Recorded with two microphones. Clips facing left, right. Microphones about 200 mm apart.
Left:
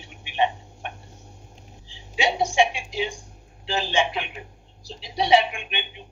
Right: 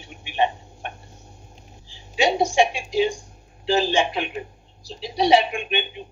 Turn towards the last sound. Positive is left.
turn(degrees=-40)  # may be behind; listen again after turning